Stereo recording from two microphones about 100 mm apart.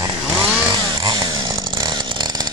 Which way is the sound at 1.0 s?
40° right (ahead or behind).